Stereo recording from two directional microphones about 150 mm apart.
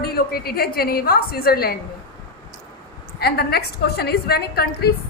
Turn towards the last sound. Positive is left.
turn(degrees=90)